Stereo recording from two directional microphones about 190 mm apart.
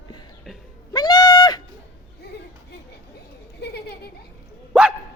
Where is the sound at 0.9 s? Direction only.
20° left (ahead or behind).